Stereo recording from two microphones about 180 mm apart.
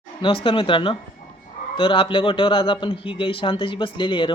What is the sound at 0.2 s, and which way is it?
Speech, 30° left (ahead or behind).